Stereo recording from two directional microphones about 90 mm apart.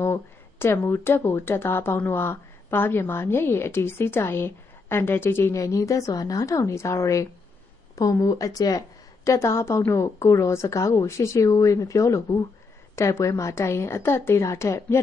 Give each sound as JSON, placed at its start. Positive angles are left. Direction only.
{"t": 0.0, "sound": "speech", "side_deg": 30}